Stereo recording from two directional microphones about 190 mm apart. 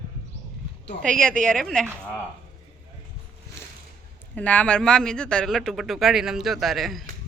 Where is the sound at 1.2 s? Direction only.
5° left (ahead or behind).